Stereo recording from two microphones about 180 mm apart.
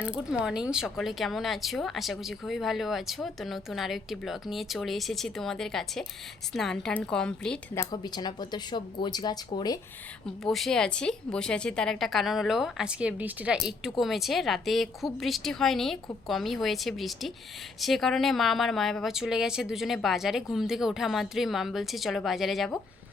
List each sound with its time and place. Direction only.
0.0 s a woman's voice: 5° right (ahead or behind)
7.9 s speech: 25° left (ahead or behind)
10.4 s a woman's voice: centre (ahead or behind)